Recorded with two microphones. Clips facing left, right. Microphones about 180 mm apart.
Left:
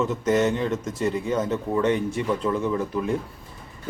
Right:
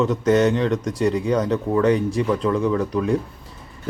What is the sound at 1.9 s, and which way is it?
Speech, 35° right (ahead or behind).